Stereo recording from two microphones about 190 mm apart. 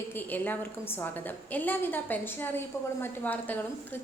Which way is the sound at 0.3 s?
10° left (ahead or behind).